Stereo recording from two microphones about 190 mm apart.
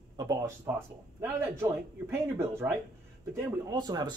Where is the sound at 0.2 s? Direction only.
20° right (ahead or behind).